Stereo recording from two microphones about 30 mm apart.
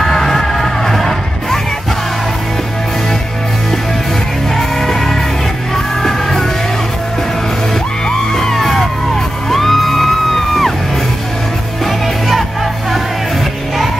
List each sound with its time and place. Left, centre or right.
0.1 s music: centre
4.6 s music: centre
8.1 s music: centre
11.8 s music: centre